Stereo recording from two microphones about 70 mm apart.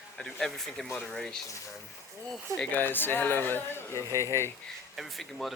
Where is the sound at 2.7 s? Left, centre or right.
Left.